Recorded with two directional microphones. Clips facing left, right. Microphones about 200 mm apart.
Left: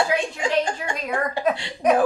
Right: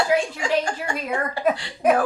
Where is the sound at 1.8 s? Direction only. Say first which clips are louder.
Even; 5° right (ahead or behind).